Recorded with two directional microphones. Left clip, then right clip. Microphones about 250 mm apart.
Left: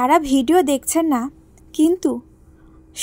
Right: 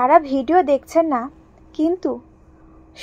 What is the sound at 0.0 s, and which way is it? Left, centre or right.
A woman's voice, left.